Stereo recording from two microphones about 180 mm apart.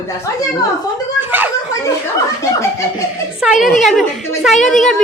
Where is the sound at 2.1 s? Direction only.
15° left (ahead or behind).